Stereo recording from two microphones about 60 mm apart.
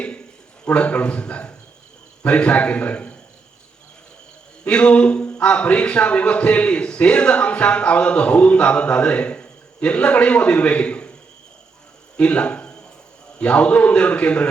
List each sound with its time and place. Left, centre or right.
0.6 s speech: left
4.6 s speech: centre
12.1 s a sound: centre
13.4 s speech: left